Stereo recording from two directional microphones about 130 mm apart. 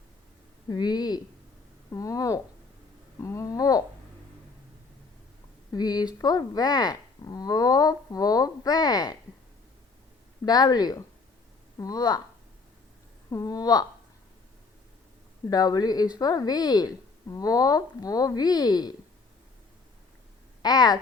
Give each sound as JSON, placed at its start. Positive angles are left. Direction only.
{"t": 0.7, "sound": "speech", "side_deg": 30}
{"t": 5.7, "sound": "speech", "side_deg": 30}
{"t": 10.4, "sound": "speech", "side_deg": 30}
{"t": 13.3, "sound": "speech", "side_deg": 30}
{"t": 15.4, "sound": "speech", "side_deg": 30}
{"t": 20.6, "sound": "speech", "side_deg": 30}